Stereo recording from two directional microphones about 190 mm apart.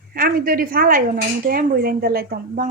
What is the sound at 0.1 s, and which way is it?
Speech, 50° right (ahead or behind).